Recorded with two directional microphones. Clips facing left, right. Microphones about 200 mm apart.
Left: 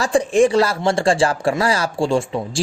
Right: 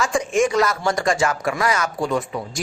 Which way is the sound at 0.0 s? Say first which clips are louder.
Left 5 dB; 35° left (ahead or behind).